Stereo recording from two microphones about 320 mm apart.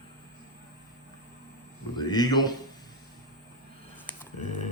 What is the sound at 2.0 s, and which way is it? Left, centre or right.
Speech, centre.